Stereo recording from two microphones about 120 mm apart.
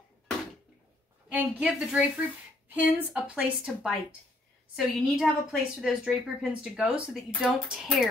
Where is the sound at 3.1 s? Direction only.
10° right (ahead or behind).